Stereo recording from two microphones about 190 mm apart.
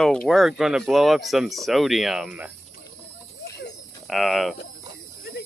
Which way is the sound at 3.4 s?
60° left (ahead or behind).